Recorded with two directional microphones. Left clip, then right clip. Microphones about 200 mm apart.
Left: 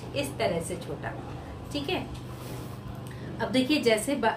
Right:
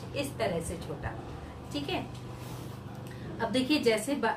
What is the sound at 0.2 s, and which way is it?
Speech, 15° left (ahead or behind).